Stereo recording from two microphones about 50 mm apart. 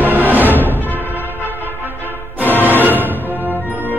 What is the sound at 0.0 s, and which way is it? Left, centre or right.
Music, right.